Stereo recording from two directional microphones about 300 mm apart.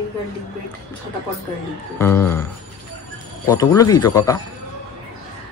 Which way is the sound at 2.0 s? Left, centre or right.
Centre.